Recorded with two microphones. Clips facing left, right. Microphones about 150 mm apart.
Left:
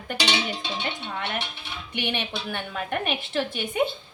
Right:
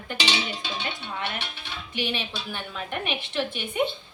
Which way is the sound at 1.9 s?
60° left (ahead or behind).